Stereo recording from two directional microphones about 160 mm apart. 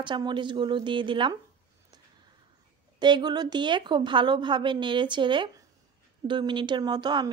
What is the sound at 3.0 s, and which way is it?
Speech, 25° right (ahead or behind).